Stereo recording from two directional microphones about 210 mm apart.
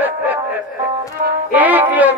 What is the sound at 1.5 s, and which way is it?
Music, 10° right (ahead or behind).